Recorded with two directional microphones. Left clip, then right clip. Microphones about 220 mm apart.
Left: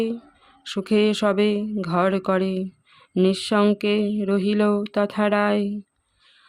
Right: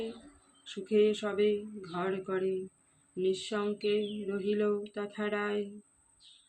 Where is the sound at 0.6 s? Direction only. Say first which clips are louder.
Left 7 dB; 50° left (ahead or behind).